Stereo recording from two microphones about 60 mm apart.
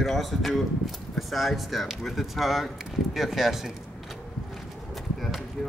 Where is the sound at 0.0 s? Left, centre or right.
Centre.